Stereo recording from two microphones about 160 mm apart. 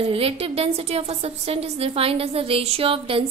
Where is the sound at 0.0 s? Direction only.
35° right (ahead or behind).